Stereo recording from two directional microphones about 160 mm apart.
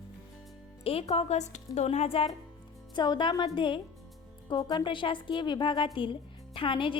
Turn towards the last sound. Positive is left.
turn(degrees=30)  # may be behind; listen again after turning